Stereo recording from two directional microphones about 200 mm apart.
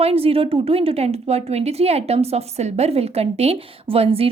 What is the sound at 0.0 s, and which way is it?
A woman's voice, 30° right (ahead or behind).